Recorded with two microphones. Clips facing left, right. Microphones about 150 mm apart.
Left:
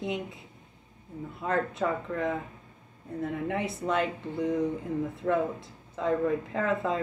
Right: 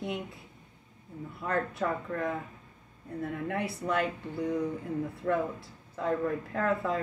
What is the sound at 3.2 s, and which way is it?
Speech, 20° left (ahead or behind).